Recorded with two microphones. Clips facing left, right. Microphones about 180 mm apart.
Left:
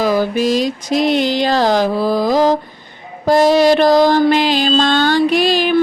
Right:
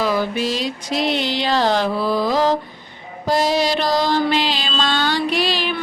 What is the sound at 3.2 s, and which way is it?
Music, 50° left (ahead or behind).